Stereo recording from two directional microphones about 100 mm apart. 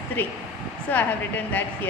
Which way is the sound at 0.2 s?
20° left (ahead or behind).